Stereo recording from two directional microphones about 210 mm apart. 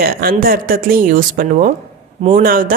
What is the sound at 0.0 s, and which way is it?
A woman's voice, 45° right (ahead or behind).